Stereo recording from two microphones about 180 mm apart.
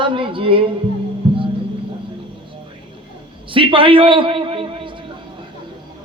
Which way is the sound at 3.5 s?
30° right (ahead or behind).